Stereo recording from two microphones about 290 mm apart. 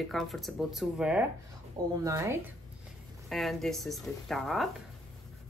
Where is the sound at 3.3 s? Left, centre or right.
Centre.